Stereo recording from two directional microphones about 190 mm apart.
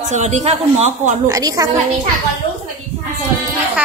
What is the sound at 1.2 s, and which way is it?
Speech, 20° right (ahead or behind).